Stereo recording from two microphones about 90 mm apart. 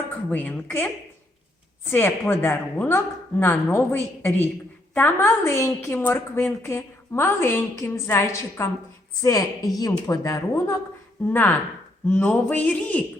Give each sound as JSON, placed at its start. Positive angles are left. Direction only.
{"t": 0.3, "sound": "a woman's voice", "side_deg": 20}
{"t": 9.2, "sound": "a woman's voice", "side_deg": 40}
{"t": 11.3, "sound": "a woman's voice", "side_deg": 20}